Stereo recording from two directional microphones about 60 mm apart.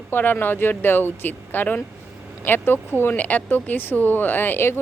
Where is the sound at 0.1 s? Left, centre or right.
Left.